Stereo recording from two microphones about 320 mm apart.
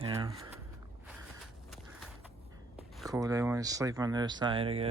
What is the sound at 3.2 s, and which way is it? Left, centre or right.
Speech, centre.